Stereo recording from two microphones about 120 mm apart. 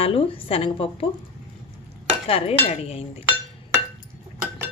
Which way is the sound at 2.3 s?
55° left (ahead or behind).